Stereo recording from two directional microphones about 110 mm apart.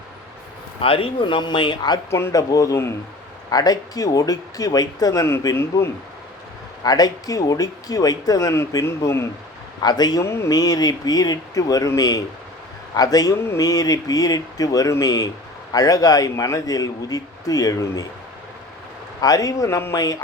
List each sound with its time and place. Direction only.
0.8 s speech: 60° left (ahead or behind); by 2.0 s 40° left (ahead or behind)
2.0 s speech: 25° left (ahead or behind)
6.8 s speech: 35° left (ahead or behind)
9.8 s speech: 40° left (ahead or behind)
10.2 s speech: 25° left (ahead or behind)
19.2 s speech: 35° left (ahead or behind)